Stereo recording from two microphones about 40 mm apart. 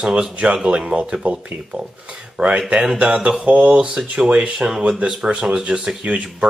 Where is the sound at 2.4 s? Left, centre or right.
Centre.